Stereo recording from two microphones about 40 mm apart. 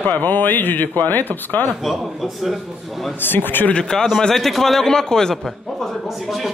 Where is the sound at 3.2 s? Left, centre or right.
Left.